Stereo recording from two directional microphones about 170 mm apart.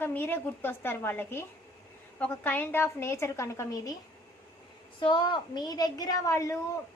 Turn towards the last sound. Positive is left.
turn(degrees=20)  # may be behind; listen again after turning